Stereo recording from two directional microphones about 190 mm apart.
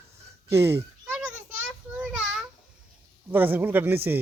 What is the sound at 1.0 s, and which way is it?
Children playing, 5° right (ahead or behind).